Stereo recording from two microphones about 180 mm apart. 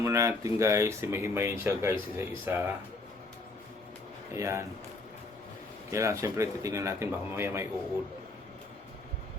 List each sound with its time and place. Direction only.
0.0 s speech: 15° right (ahead or behind)
4.4 s speech: 15° right (ahead or behind)
5.9 s speech: 15° right (ahead or behind)